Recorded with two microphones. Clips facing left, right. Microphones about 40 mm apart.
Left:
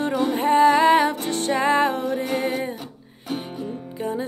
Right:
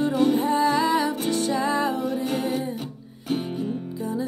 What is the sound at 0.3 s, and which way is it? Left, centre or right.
Music, left.